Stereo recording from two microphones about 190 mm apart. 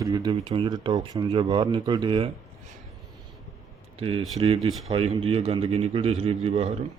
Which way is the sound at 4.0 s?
30° right (ahead or behind).